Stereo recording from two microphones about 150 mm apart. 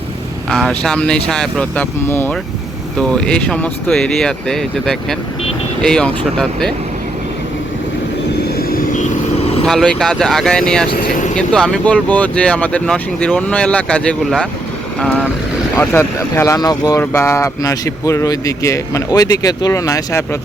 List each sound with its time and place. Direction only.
0.5 s speech: 5° left (ahead or behind)
8.8 s vehicle: 55° left (ahead or behind)
9.6 s speech: 5° left (ahead or behind)
10.9 s speech: 60° left (ahead or behind)
11.3 s speech: 5° left (ahead or behind); by 20.2 s 20° left (ahead or behind)